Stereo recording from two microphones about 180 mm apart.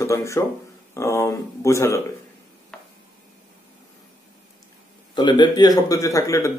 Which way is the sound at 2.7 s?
5° left (ahead or behind).